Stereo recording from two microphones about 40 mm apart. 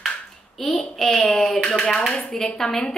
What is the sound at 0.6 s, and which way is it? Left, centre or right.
A child's voice, centre.